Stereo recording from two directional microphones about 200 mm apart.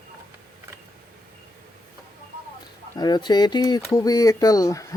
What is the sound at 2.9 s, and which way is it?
Speech, 20° left (ahead or behind).